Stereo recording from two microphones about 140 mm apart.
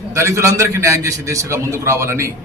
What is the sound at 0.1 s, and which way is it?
A man's voice, 20° right (ahead or behind).